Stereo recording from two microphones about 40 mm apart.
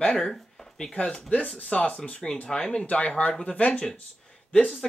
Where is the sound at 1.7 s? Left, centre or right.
Left.